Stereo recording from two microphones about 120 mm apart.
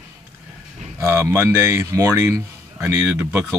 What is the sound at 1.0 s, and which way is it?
A man's voice, 20° right (ahead or behind).